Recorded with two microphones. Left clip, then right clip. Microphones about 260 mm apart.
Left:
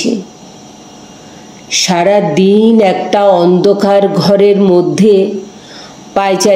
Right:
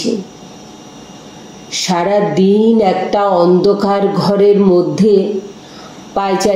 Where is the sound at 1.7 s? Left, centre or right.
Left.